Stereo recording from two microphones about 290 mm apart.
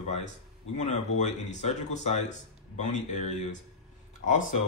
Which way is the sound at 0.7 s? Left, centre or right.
Left.